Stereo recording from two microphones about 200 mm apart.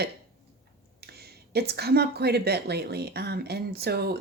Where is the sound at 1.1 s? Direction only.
55° right (ahead or behind).